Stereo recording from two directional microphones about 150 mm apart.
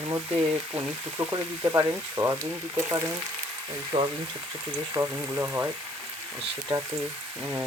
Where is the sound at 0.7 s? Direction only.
15° right (ahead or behind); by 4.1 s 30° right (ahead or behind).